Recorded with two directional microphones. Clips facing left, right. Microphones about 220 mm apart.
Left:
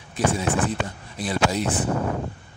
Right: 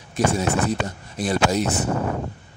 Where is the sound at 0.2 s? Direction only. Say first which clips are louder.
Right 2 dB; 40° right (ahead or behind).